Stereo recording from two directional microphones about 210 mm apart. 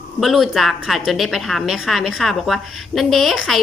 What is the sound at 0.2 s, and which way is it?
A woman's voice, centre (ahead or behind).